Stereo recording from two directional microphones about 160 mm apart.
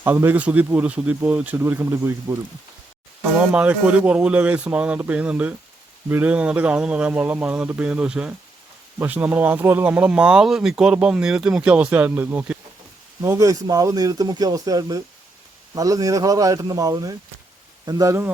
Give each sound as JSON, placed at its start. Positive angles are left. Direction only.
{"t": 0.0, "sound": "speech", "side_deg": -15}